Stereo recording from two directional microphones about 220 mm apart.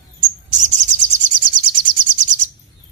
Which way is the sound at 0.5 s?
35° right (ahead or behind).